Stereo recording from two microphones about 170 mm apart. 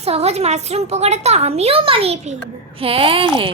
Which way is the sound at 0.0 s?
40° right (ahead or behind).